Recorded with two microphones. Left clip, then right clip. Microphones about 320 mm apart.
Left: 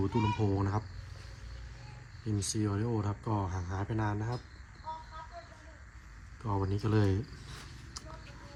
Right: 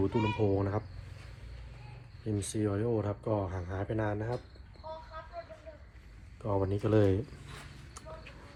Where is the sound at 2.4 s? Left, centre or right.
Centre.